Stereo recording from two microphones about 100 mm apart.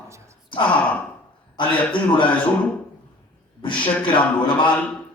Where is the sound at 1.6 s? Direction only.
55° left (ahead or behind).